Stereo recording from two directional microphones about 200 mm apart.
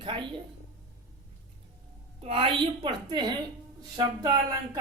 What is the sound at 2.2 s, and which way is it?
Speech, 25° right (ahead or behind).